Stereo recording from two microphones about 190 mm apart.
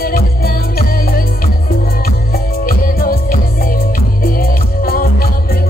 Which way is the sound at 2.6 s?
50° left (ahead or behind).